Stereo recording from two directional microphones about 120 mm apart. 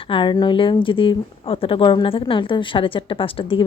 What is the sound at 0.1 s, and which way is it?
Speech, 40° left (ahead or behind).